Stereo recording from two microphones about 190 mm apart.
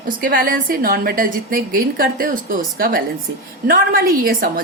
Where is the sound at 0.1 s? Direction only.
50° right (ahead or behind).